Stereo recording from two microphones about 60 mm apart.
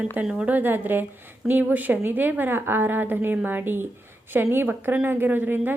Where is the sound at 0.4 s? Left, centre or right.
Right.